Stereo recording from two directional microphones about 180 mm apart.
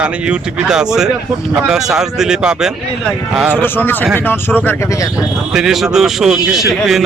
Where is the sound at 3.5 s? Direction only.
10° left (ahead or behind).